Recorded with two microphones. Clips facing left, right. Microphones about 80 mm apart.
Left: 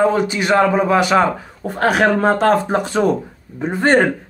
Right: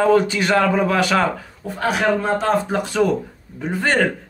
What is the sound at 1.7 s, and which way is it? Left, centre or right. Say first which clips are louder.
Speech: left 4 dB; left.